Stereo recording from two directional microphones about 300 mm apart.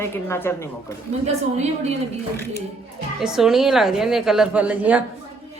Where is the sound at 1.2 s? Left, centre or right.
Right.